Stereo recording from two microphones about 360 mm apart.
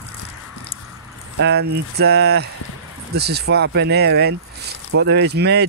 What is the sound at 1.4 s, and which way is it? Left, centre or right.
Speech, right.